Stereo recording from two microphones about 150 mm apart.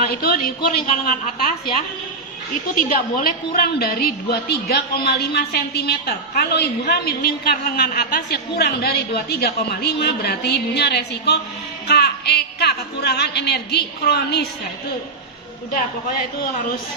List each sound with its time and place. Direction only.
0.1 s a woman's voice: 85° left; by 1.1 s 65° left (ahead or behind)
2.7 s a woman's voice: 70° left (ahead or behind)
8.1 s a woman's voice: 90° left